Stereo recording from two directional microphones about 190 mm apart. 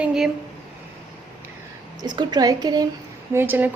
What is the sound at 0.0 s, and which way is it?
Speech, 5° right (ahead or behind).